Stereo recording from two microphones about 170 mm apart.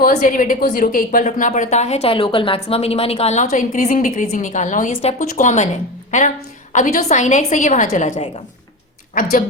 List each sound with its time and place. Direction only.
0.0 s a woman's voice: 50° left (ahead or behind)